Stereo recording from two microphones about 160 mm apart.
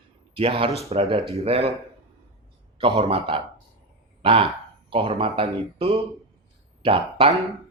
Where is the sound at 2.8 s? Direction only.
35° right (ahead or behind).